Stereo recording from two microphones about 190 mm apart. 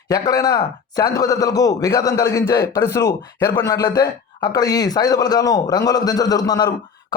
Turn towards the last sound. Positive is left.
turn(degrees=20)  # may be behind; listen again after turning